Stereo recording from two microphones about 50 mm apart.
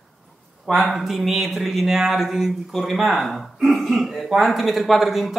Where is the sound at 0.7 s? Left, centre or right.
Centre.